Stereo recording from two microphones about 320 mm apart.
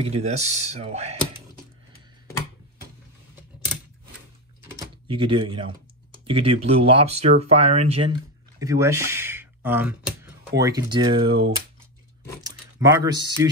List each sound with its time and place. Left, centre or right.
0.0 s speech: centre
4.7 s speech: centre
12.4 s speech: centre